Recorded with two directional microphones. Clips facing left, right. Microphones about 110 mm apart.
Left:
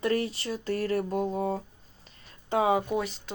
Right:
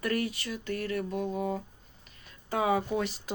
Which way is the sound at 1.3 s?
35° left (ahead or behind).